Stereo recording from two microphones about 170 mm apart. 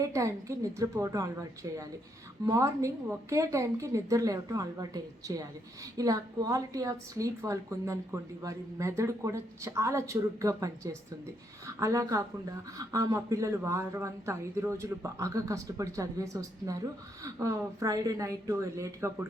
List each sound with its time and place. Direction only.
0.0 s a woman's voice: 20° right (ahead or behind)